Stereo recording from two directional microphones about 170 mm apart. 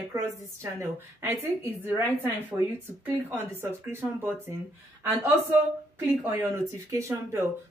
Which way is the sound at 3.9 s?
15° right (ahead or behind).